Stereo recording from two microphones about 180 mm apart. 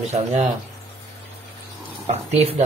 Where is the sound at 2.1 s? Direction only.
35° right (ahead or behind).